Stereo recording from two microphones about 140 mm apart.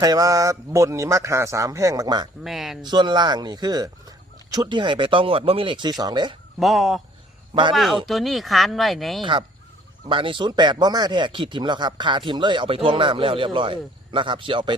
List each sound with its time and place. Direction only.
0.0 s speech: 25° right (ahead or behind)
2.4 s speech: centre (ahead or behind)
2.8 s speech: 30° right (ahead or behind)
6.6 s speech: centre (ahead or behind)
10.1 s speech: 35° right (ahead or behind)